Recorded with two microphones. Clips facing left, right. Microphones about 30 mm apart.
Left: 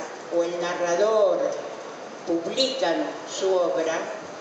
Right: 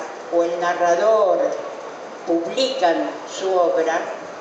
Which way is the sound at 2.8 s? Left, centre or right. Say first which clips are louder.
Right 6 dB; centre.